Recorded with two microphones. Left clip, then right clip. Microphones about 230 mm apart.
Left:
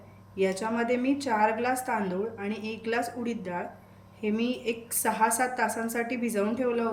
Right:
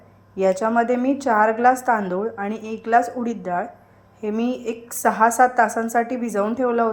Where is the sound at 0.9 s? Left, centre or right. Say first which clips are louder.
Right 7 dB; centre.